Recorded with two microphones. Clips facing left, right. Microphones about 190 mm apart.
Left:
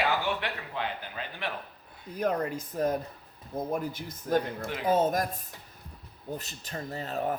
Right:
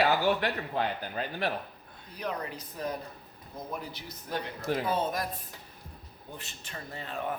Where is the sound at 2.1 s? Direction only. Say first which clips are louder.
Left 7 dB; 45° left (ahead or behind).